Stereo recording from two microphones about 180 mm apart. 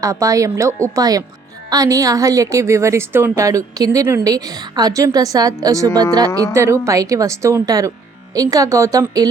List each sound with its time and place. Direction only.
0.0 s a woman's voice: 20° right (ahead or behind)